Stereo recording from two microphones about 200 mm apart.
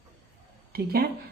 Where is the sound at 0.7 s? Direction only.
50° right (ahead or behind).